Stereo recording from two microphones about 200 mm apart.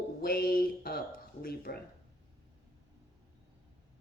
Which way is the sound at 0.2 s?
50° left (ahead or behind).